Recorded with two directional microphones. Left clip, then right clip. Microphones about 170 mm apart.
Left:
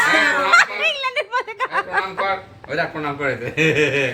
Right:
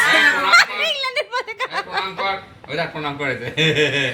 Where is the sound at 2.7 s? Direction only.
20° right (ahead or behind).